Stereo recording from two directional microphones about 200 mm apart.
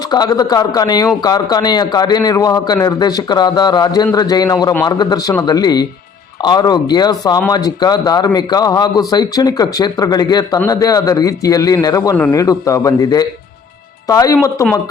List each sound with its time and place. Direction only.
0.1 s a man's voice: 20° left (ahead or behind)